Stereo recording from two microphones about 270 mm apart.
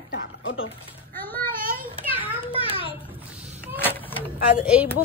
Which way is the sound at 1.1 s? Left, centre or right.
Centre.